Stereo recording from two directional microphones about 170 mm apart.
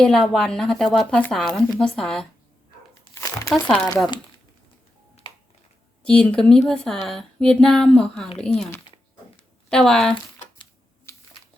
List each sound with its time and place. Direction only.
0.0 s speech: centre (ahead or behind)
3.2 s crumpling: 20° left (ahead or behind)
3.5 s speech: centre (ahead or behind)
6.1 s speech: 5° left (ahead or behind)
9.3 s a sound: 5° left (ahead or behind)
11.1 s a sound: 15° left (ahead or behind)